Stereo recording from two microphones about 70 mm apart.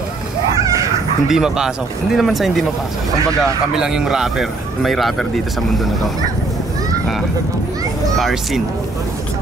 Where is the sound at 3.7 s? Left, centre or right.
Centre.